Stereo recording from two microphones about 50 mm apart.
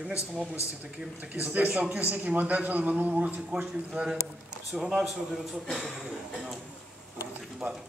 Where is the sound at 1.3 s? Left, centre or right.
Right.